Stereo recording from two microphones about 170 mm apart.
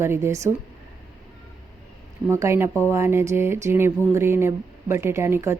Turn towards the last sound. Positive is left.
turn(degrees=-15)  # may be behind; listen again after turning